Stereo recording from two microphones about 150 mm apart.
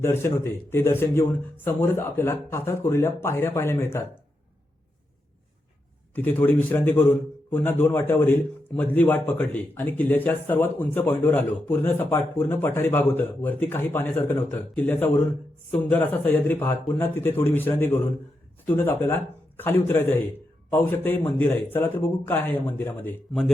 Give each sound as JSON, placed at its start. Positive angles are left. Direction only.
{"t": 0.0, "sound": "a man's voice", "side_deg": 15}
{"t": 6.1, "sound": "a man's voice", "side_deg": 15}